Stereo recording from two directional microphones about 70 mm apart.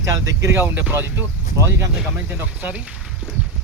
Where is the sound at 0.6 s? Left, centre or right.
Right.